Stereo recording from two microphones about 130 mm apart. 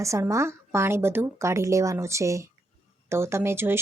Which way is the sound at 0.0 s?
25° right (ahead or behind).